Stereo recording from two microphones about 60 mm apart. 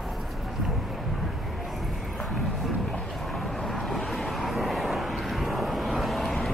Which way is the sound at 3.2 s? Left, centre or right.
Centre.